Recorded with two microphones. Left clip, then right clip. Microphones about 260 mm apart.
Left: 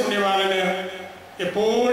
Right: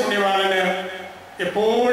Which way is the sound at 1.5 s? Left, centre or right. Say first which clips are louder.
Right 2 dB; right.